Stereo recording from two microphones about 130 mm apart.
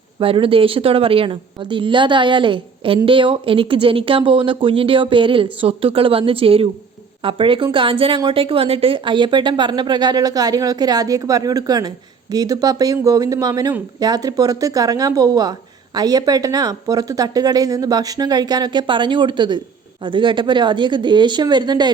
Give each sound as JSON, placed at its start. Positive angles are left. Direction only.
{"t": 0.2, "sound": "a woman's voice", "side_deg": -45}